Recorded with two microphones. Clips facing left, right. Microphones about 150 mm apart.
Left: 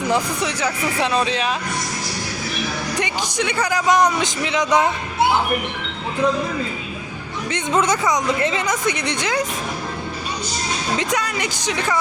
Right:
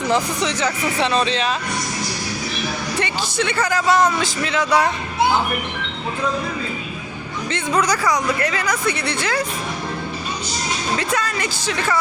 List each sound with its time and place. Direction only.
0.1 s speech: 10° left (ahead or behind)
3.0 s speech: 15° left (ahead or behind)
7.5 s speech: 25° left (ahead or behind)
10.9 s speech: 15° left (ahead or behind)